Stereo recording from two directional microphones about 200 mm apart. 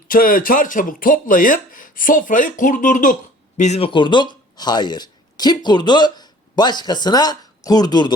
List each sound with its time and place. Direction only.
0.1 s speech: 45° left (ahead or behind); by 8.1 s 20° left (ahead or behind)